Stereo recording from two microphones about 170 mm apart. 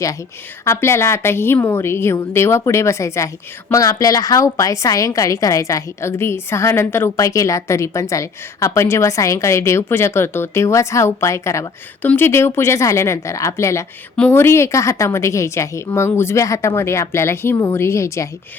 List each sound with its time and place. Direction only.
0.6 s a woman's voice: 15° left (ahead or behind)